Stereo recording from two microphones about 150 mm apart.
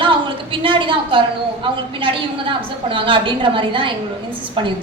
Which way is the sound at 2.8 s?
35° right (ahead or behind).